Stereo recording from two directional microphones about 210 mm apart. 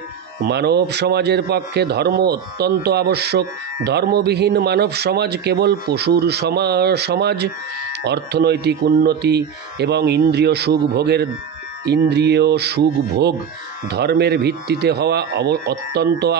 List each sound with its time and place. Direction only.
0.5 s speech: 50° right (ahead or behind)